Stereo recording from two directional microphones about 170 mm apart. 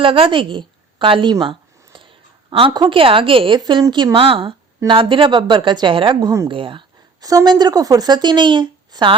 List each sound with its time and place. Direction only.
0.0 s a sound: 30° right (ahead or behind)
2.5 s a woman's voice: 30° right (ahead or behind)
6.5 s speech: 30° right (ahead or behind)